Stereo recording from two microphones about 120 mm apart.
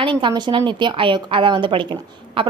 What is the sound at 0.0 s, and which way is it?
A woman's voice, 40° right (ahead or behind).